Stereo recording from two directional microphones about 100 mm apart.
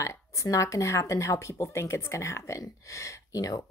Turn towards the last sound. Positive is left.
turn(degrees=35)  # may be behind; listen again after turning